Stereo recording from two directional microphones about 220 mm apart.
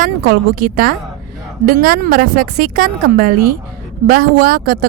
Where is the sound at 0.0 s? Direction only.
40° right (ahead or behind).